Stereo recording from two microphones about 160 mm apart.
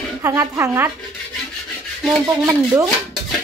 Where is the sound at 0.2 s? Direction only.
20° right (ahead or behind).